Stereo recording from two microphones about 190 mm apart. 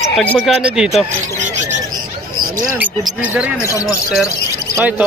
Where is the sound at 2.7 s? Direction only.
10° right (ahead or behind).